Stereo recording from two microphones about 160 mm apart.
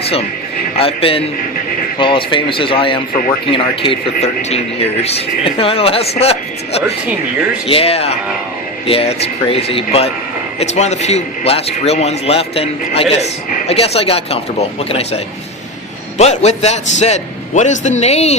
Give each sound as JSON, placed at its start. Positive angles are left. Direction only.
{"t": 0.0, "sound": "a man's voice", "side_deg": 40}
{"t": 7.7, "sound": "a man's voice", "side_deg": 35}